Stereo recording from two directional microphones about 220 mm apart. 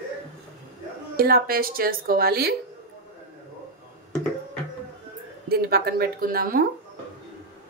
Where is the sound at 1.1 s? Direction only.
40° right (ahead or behind).